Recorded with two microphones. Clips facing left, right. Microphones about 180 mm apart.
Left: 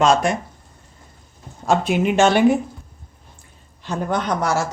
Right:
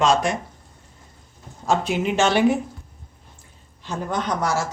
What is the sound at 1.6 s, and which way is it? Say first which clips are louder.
Speech: left 3 dB; 60° left (ahead or behind).